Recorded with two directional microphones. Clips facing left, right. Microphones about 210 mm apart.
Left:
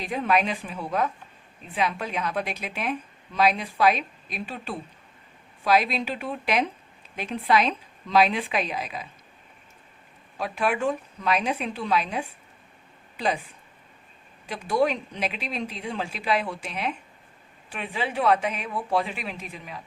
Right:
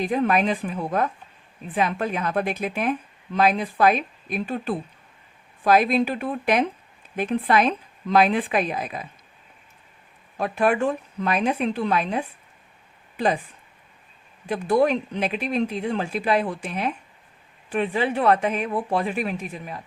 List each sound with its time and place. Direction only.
0.0 s speech: 50° right (ahead or behind)
10.3 s speech: 50° right (ahead or behind)
14.4 s speech: 50° right (ahead or behind)